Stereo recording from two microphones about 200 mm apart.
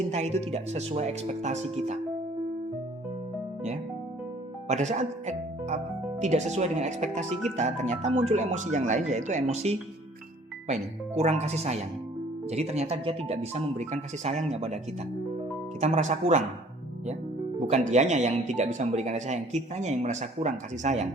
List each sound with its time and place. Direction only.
0.1 s speech: 35° right (ahead or behind)
4.7 s speech: 35° right (ahead or behind)
11.2 s speech: 30° right (ahead or behind)
15.8 s speech: 35° right (ahead or behind)
17.7 s speech: 35° right (ahead or behind)